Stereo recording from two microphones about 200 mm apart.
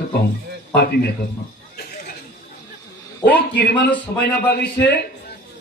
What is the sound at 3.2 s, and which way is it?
Speech, 55° left (ahead or behind).